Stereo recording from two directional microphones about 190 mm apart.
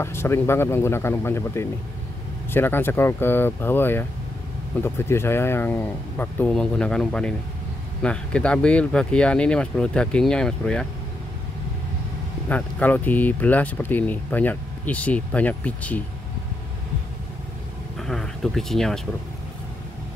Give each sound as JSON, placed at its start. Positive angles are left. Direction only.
{"t": 0.0, "sound": "speech", "side_deg": 15}
{"t": 12.4, "sound": "speech", "side_deg": 10}
{"t": 17.9, "sound": "a sound", "side_deg": 0}